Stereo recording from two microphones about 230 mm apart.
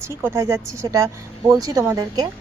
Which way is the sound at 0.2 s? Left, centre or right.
Centre.